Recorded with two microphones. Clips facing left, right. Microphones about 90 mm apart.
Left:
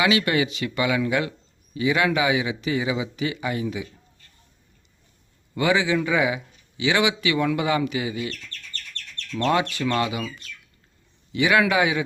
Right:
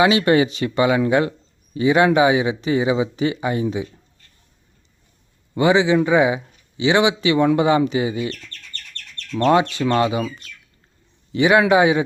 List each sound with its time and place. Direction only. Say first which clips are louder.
0.0 s speech: right 6 dB; 30° right (ahead or behind)
5.5 s speech: right 6 dB; 25° right (ahead or behind)